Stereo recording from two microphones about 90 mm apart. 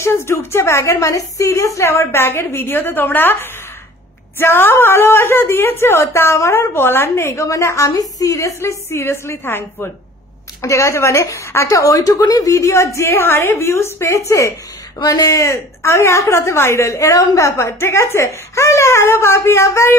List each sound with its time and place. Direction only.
0.0 s a woman's voice: 30° left (ahead or behind)
10.6 s a woman's voice: 35° left (ahead or behind)